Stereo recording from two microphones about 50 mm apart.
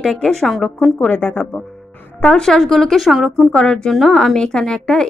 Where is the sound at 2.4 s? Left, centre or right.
Centre.